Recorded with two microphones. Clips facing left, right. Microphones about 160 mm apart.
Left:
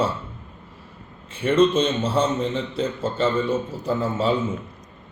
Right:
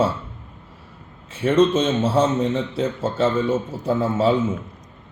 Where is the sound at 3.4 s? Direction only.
25° right (ahead or behind).